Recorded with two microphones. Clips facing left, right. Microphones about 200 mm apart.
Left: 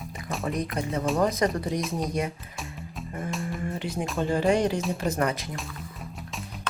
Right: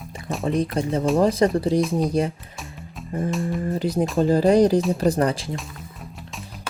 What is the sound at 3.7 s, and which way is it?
Speech, 35° right (ahead or behind).